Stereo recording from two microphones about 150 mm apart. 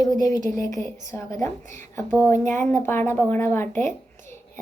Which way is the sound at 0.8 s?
20° left (ahead or behind).